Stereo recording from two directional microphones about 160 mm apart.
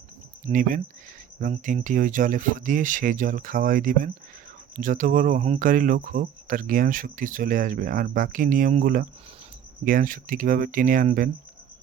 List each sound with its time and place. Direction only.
0.4 s speech: 55° right (ahead or behind)
5.4 s speech: 40° right (ahead or behind)
5.6 s speech: 60° right (ahead or behind)